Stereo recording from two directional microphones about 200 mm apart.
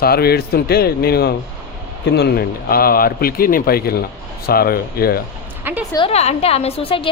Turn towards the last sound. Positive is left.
turn(degrees=25)  # may be behind; listen again after turning